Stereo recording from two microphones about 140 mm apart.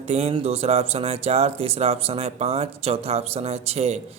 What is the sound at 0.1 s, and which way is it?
A man's voice, 45° right (ahead or behind).